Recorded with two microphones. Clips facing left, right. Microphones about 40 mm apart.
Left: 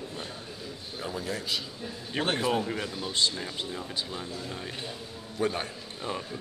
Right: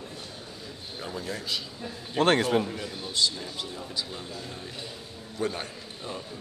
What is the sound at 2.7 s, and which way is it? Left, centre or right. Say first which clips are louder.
Speech: left 3 dB; left.